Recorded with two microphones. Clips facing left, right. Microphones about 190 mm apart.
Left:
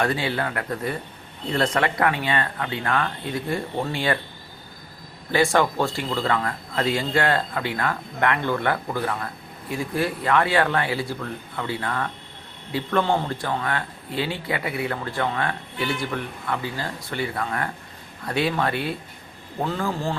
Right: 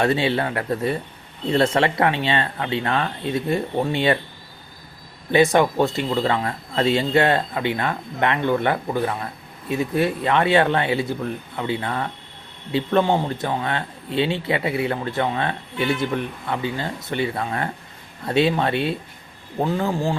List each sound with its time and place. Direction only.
0.0 s speech: 25° right (ahead or behind)
5.3 s speech: 20° right (ahead or behind)